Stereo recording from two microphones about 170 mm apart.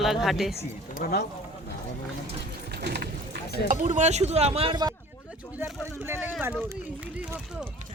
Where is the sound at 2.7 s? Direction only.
75° right (ahead or behind).